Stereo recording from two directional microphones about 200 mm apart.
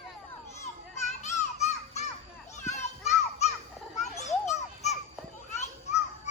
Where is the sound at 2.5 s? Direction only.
35° left (ahead or behind).